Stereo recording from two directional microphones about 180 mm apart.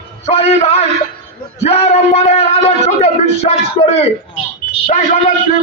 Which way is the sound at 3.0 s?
35° left (ahead or behind).